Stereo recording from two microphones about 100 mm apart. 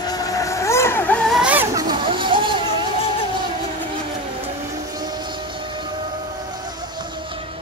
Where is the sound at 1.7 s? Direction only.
40° right (ahead or behind).